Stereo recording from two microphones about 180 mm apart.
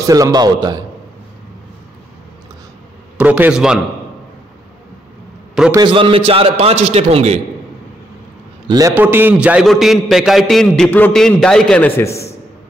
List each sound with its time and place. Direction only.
0.0 s a man's voice: 20° right (ahead or behind)
3.2 s a man's voice: 10° right (ahead or behind)
5.7 s a man's voice: 25° right (ahead or behind)
8.6 s a man's voice: 20° right (ahead or behind)
8.9 s a man's voice: 10° right (ahead or behind)